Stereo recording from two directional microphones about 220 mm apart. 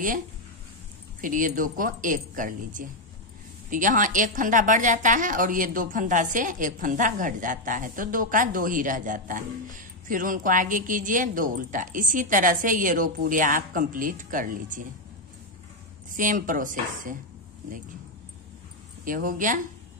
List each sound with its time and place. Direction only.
1.2 s a woman's voice: 35° right (ahead or behind)
16.2 s a woman's voice: 35° right (ahead or behind)
19.0 s a woman's voice: 40° right (ahead or behind)